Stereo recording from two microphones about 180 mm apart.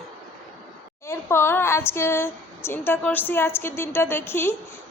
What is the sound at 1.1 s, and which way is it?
Speech, 15° left (ahead or behind).